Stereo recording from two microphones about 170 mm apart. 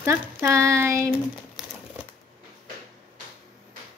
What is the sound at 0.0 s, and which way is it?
Speech, 15° right (ahead or behind).